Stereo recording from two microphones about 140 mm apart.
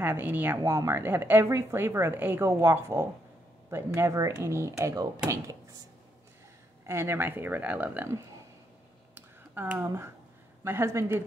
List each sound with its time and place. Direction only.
0.0 s speech: 15° right (ahead or behind)
6.9 s speech: 20° right (ahead or behind)
9.1 s a sound: 15° right (ahead or behind)
10.6 s speech: 20° right (ahead or behind)